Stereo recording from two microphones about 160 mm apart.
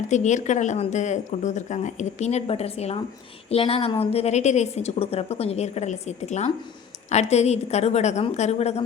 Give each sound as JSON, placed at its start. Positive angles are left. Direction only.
{"t": 0.1, "sound": "a woman's voice", "side_deg": 50}